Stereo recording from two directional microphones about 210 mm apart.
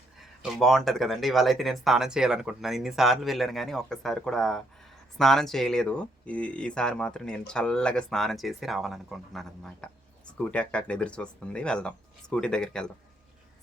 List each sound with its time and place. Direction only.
0.2 s speech: centre (ahead or behind)